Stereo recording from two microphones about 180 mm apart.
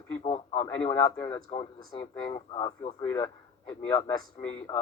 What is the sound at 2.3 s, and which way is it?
Speech, 30° left (ahead or behind).